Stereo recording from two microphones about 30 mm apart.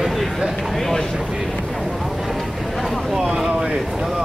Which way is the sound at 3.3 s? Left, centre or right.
Right.